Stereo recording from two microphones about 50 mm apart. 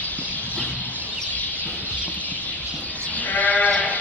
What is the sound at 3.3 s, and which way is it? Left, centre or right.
Sheep, left.